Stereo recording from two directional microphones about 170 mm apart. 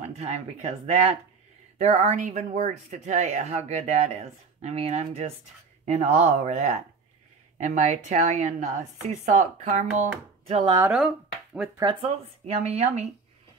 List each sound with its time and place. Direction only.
0.2 s speech: 40° right (ahead or behind)
10.5 s speech: 30° right (ahead or behind)
10.9 s speech: 5° right (ahead or behind)
11.8 s speech: 30° right (ahead or behind)